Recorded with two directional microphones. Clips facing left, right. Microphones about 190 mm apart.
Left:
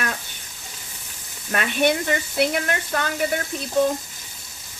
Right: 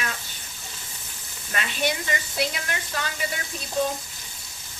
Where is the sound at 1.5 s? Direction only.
55° left (ahead or behind).